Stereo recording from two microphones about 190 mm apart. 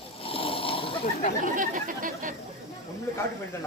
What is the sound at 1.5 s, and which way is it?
Speech, 45° right (ahead or behind).